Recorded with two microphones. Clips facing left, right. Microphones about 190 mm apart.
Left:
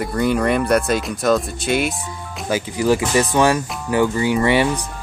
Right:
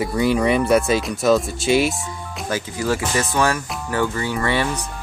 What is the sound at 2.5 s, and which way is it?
Speech, 15° left (ahead or behind).